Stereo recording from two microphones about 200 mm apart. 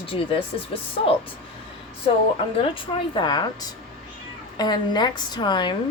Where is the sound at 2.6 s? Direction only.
25° left (ahead or behind).